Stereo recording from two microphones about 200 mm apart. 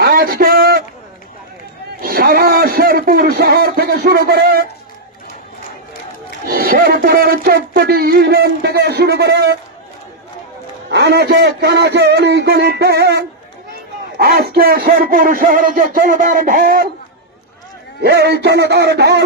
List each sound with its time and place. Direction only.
0.0 s a sound: 50° right (ahead or behind)
2.0 s speech: 45° right (ahead or behind)
6.4 s speech: 50° right (ahead or behind)
10.9 s a man's voice: 55° right (ahead or behind)
18.0 s a man's voice: 55° right (ahead or behind)